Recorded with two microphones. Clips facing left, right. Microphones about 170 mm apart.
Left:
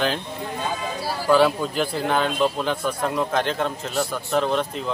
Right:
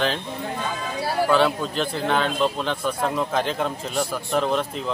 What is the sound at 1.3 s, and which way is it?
A man's voice, 5° left (ahead or behind).